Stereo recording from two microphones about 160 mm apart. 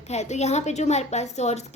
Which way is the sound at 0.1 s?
45° left (ahead or behind).